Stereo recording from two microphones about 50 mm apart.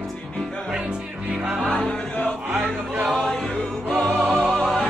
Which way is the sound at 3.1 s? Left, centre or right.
Centre.